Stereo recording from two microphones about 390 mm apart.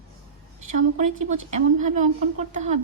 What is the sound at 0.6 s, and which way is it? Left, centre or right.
Speech, centre.